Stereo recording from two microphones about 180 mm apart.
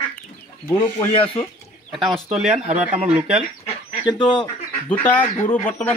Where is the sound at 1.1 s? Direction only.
30° left (ahead or behind).